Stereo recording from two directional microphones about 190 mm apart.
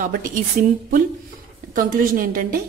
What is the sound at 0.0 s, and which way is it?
A woman's voice, 45° right (ahead or behind).